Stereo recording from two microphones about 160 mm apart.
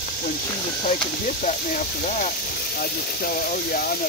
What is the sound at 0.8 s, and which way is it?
Speech, 50° left (ahead or behind).